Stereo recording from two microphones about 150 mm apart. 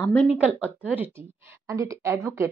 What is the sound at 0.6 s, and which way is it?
Speech, 10° right (ahead or behind).